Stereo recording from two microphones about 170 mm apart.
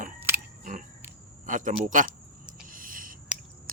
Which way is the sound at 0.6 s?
50° right (ahead or behind).